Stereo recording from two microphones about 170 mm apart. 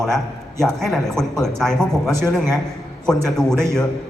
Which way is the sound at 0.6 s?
Centre (ahead or behind).